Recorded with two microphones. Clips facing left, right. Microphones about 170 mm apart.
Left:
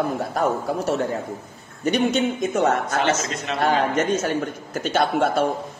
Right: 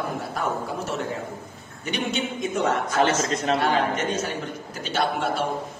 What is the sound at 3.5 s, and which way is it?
Speech, 35° right (ahead or behind).